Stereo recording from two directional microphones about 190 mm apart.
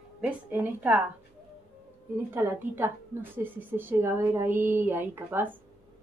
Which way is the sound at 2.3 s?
10° right (ahead or behind).